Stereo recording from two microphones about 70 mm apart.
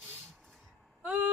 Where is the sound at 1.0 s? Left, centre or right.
Right.